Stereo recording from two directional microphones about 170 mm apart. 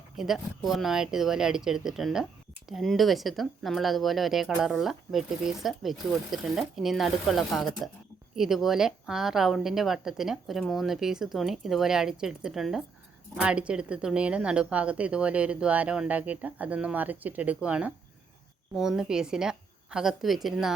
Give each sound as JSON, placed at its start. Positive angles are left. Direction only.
{"t": 0.2, "sound": "a woman's voice", "side_deg": 0}